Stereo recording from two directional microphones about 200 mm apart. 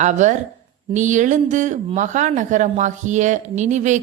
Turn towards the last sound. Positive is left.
turn(degrees=-35)  # may be behind; listen again after turning